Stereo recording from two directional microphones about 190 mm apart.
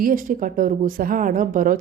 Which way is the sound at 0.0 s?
45° right (ahead or behind).